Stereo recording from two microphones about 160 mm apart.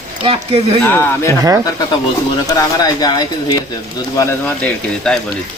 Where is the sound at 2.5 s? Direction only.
25° left (ahead or behind).